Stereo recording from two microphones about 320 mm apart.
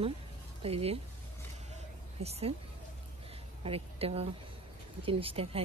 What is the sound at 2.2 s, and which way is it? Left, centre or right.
Speech, centre.